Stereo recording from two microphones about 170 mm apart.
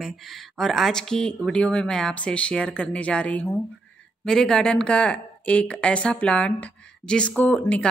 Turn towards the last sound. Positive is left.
turn(degrees=10)  # may be behind; listen again after turning